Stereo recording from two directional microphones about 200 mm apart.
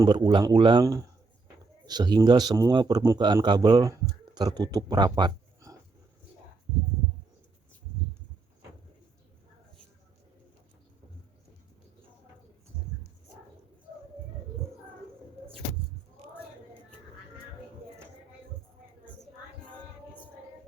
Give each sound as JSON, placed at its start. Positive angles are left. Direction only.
{"t": 0.0, "sound": "speech", "side_deg": -20}